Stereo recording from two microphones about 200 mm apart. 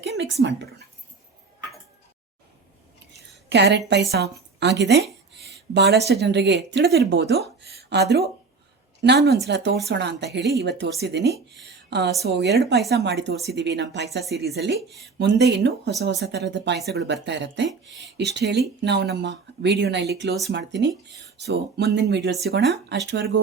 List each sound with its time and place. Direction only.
0.0 s speech: 55° right (ahead or behind)
3.1 s a woman's voice: 60° right (ahead or behind)
5.5 s a sound: 55° right (ahead or behind)
6.1 s a woman's voice: 55° right (ahead or behind)